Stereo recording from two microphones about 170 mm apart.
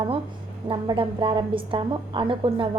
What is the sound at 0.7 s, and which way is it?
A woman's voice, 30° right (ahead or behind).